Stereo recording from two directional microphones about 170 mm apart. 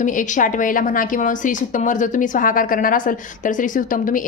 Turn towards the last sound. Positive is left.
turn(degrees=50)  # may be behind; listen again after turning